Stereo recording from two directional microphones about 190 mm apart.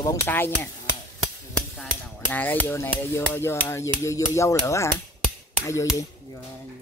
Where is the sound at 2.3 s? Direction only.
10° left (ahead or behind).